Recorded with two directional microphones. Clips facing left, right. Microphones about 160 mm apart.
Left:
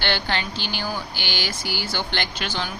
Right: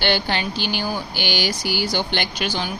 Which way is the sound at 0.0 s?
15° right (ahead or behind).